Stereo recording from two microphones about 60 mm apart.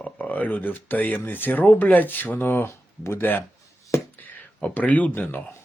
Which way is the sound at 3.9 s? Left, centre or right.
Left.